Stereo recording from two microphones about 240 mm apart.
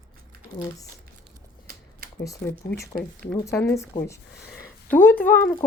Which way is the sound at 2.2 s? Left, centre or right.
Centre.